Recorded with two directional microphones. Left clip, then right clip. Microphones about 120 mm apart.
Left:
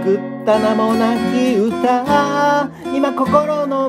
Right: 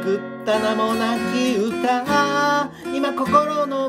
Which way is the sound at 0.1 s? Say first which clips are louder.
Left 6 dB; 20° left (ahead or behind).